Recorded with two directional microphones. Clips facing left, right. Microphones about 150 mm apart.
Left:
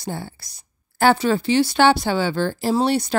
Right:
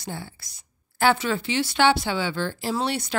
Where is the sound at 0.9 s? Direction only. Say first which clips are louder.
Left 5 dB; 40° left (ahead or behind).